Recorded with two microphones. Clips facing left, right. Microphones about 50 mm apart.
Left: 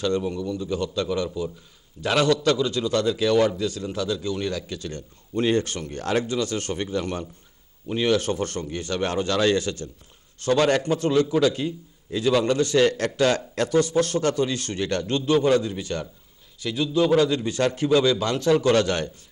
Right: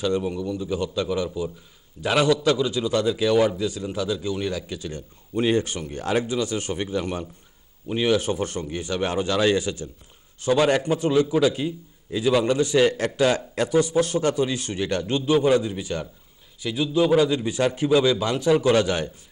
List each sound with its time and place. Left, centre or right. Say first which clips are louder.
0.0 s a man's voice: even; centre